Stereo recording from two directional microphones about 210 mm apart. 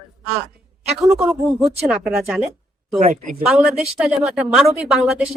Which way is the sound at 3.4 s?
5° right (ahead or behind).